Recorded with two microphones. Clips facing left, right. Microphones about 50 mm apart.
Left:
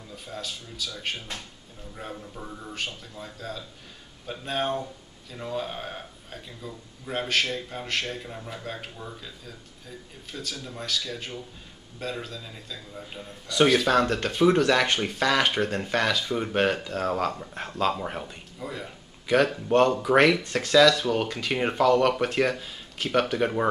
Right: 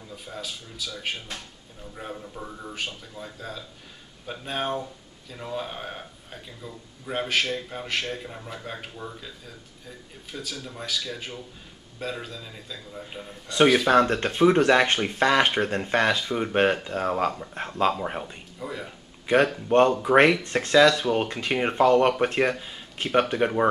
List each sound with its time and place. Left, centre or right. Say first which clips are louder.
0.1 s a man's voice: even; centre
10.6 s a man's voice: left 1 dB; centre
13.5 s a man's voice: right 2 dB; right; by 18.9 s centre
19.2 s speech: right 1 dB; right